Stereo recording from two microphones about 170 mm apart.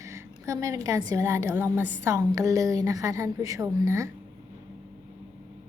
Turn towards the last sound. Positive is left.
turn(degrees=-15)  # may be behind; listen again after turning